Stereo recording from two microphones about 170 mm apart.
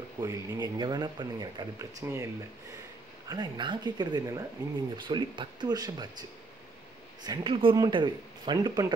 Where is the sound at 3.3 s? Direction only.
25° right (ahead or behind).